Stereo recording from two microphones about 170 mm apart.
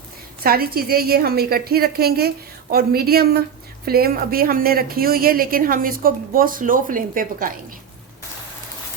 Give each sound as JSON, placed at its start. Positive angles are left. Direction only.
{"t": 0.4, "sound": "speech", "side_deg": -60}